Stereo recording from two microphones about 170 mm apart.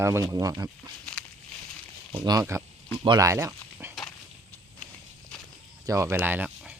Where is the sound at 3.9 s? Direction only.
Centre (ahead or behind).